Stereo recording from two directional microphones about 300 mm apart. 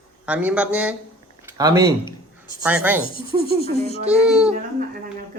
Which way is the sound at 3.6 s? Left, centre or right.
Centre.